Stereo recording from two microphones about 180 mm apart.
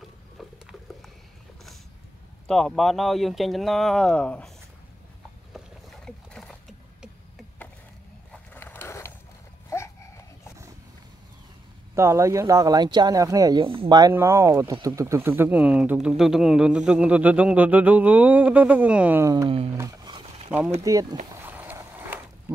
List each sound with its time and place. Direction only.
0.4 s patter: centre (ahead or behind)
2.4 s speech: 5° left (ahead or behind)
5.5 s boat: centre (ahead or behind)
8.3 s a sound: 10° left (ahead or behind)
9.7 s dog: 15° left (ahead or behind)
11.9 s speech: 15° right (ahead or behind)
19.8 s a sound: 20° right (ahead or behind)
20.8 s speech: 20° right (ahead or behind)
21.4 s a sound: 10° right (ahead or behind)